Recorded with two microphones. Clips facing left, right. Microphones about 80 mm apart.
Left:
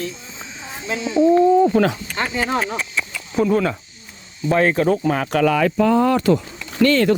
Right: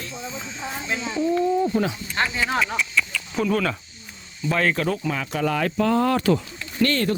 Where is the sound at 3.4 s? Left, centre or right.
Left.